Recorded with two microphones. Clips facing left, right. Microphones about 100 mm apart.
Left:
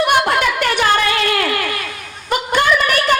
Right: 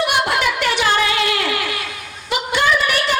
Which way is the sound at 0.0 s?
45° left (ahead or behind).